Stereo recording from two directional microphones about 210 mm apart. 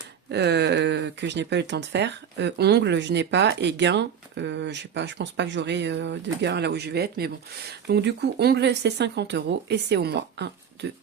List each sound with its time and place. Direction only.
0.3 s speech: 55° right (ahead or behind)